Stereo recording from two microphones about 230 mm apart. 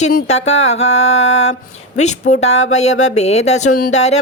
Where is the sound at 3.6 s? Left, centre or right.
Left.